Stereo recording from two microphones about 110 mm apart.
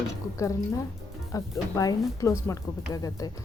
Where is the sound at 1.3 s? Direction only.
30° left (ahead or behind).